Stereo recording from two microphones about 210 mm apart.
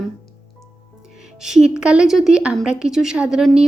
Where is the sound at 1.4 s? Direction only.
5° right (ahead or behind).